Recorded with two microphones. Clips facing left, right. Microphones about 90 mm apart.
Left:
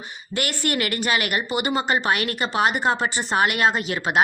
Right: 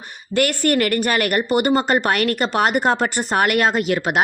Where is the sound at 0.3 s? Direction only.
50° right (ahead or behind).